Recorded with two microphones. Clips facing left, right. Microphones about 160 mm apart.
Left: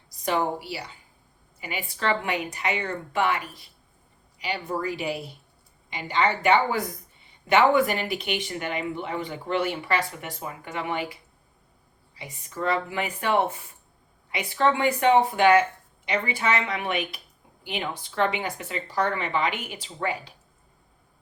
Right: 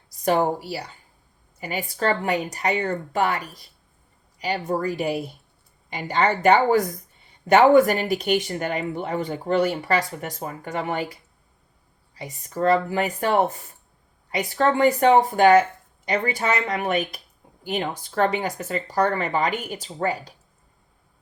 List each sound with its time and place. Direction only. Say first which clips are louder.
0.3 s speech: right 5 dB; 45° right (ahead or behind)